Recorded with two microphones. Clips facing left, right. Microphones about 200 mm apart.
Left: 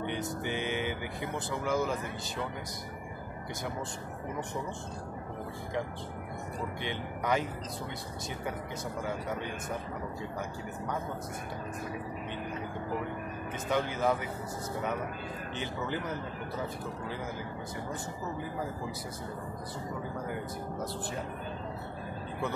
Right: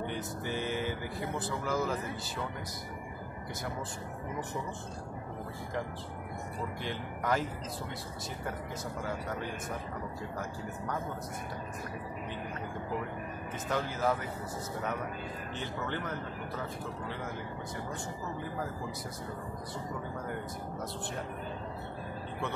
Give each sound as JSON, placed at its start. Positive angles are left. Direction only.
{"t": 0.5, "sound": "speech", "side_deg": 75}
{"t": 1.6, "sound": "speech", "side_deg": 0}
{"t": 6.8, "sound": "speech", "side_deg": 0}
{"t": 9.0, "sound": "speech", "side_deg": 0}
{"t": 13.7, "sound": "speech", "side_deg": 0}
{"t": 15.5, "sound": "speech", "side_deg": 0}